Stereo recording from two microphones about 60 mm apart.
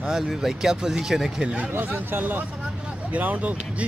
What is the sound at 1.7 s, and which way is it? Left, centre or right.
Speech, right.